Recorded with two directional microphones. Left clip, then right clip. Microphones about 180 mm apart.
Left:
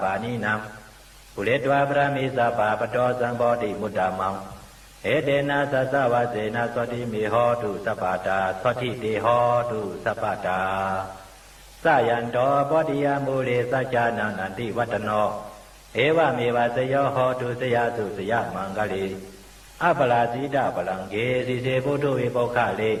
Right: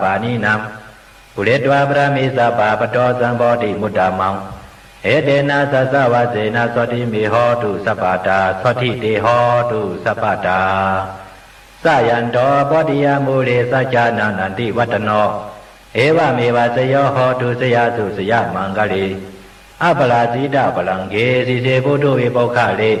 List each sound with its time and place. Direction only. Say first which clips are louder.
0.0 s a man's voice: right 9 dB; 30° left (ahead or behind)